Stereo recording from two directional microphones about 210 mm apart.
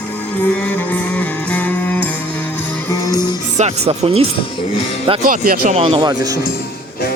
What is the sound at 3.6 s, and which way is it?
Speech, 30° right (ahead or behind).